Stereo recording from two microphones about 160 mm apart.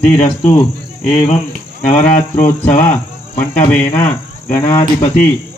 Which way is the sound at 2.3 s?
10° left (ahead or behind).